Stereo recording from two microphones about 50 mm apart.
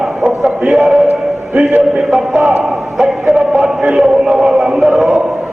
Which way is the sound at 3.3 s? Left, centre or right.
Centre.